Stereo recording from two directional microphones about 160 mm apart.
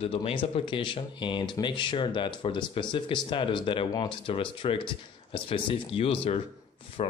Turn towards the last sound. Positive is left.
turn(degrees=40)  # may be behind; listen again after turning